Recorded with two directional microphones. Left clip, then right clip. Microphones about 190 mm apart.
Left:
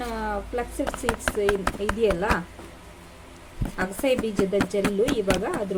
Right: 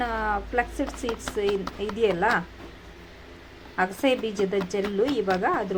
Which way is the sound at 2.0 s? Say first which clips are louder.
Right 2 dB; centre (ahead or behind).